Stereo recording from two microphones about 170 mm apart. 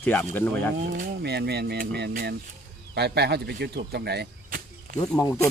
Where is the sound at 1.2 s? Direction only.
75° right (ahead or behind).